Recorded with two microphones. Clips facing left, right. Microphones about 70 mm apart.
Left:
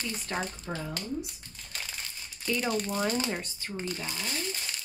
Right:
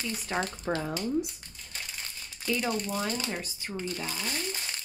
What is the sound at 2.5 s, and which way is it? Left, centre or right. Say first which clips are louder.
Speech: even; centre.